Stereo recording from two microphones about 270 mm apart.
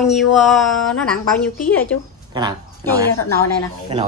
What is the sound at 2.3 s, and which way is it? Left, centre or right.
Speech, centre.